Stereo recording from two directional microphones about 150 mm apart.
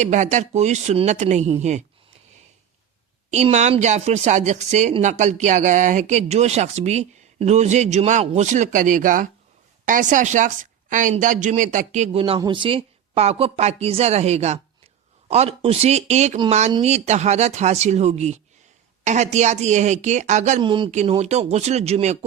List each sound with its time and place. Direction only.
0.0 s a woman's voice: 50° right (ahead or behind)
3.2 s a woman's voice: 50° right (ahead or behind)
20.6 s speech: 35° right (ahead or behind)
20.9 s a woman's voice: 45° right (ahead or behind)